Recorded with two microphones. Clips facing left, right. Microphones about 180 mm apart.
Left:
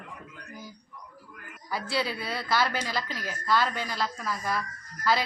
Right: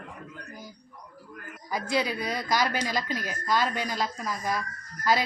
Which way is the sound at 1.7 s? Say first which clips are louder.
Right 2 dB; 15° right (ahead or behind).